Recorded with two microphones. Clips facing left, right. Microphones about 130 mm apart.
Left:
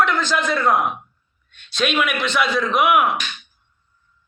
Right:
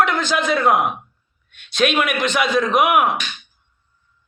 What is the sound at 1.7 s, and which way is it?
Speech, 50° right (ahead or behind).